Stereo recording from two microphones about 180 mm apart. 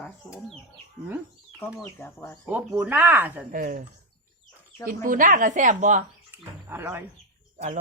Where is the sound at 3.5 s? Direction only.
50° right (ahead or behind).